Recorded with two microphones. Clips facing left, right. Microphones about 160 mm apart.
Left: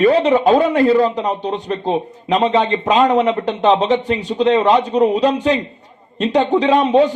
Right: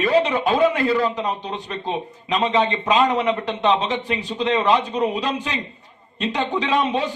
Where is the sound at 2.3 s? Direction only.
40° left (ahead or behind).